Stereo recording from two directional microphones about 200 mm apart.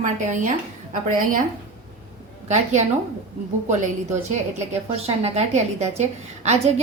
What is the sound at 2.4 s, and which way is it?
Speech, 35° right (ahead or behind).